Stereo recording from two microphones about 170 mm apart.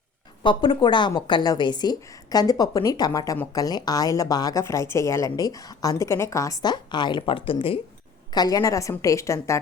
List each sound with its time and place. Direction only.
0.4 s a woman's voice: 25° left (ahead or behind)